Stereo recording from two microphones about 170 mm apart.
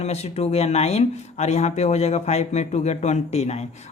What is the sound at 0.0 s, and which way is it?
Speech, 40° left (ahead or behind).